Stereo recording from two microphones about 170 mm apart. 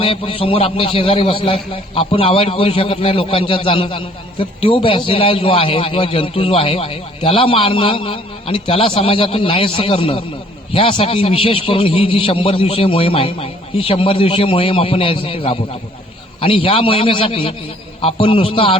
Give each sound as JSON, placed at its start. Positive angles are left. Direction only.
{"t": 0.0, "sound": "a man's voice", "side_deg": 30}